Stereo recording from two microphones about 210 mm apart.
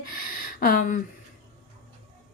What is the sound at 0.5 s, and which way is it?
Speech, 45° left (ahead or behind).